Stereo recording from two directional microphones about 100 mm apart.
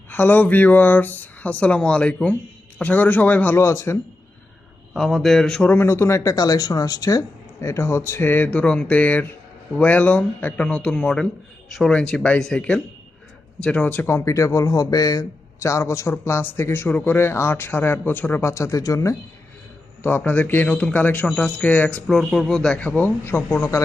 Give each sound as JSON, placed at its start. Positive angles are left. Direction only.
{"t": 0.1, "sound": "speech", "side_deg": 20}
{"t": 4.9, "sound": "speech", "side_deg": 0}
{"t": 5.7, "sound": "speech", "side_deg": 25}
{"t": 20.0, "sound": "speech", "side_deg": 20}
{"t": 22.0, "sound": "speech", "side_deg": 0}